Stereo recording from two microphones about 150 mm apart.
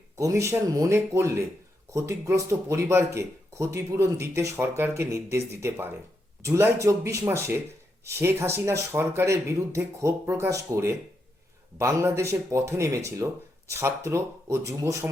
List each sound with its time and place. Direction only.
0.2 s speech: 20° right (ahead or behind)